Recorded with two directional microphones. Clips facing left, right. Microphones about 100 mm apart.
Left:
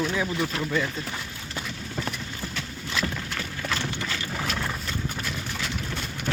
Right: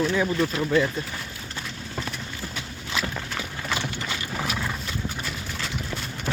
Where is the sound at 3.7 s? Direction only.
10° right (ahead or behind).